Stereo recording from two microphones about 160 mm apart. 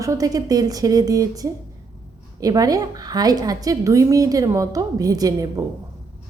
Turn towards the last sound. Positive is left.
turn(degrees=-20)  # may be behind; listen again after turning